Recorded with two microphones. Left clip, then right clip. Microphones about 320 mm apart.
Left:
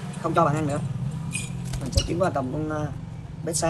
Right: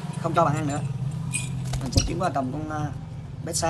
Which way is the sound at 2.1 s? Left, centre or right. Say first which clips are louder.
Left 4 dB; centre.